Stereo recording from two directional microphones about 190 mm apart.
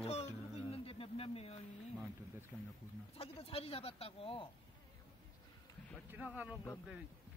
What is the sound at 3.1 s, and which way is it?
Speech, 30° left (ahead or behind).